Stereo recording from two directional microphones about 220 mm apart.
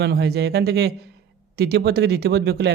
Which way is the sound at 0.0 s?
50° right (ahead or behind).